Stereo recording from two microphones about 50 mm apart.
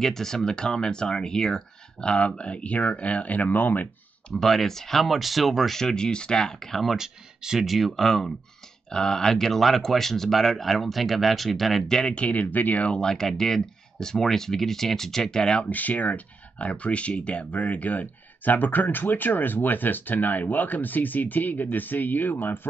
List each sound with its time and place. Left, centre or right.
0.0 s speech: centre; by 3.9 s left
4.3 s speech: centre
7.0 s speech: centre
12.0 s speech: left
12.9 s speech: centre
15.7 s speech: left